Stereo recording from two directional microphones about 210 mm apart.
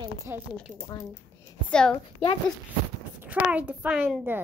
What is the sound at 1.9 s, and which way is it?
Speech, 25° left (ahead or behind).